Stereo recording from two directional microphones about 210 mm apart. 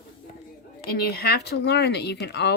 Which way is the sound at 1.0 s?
45° left (ahead or behind).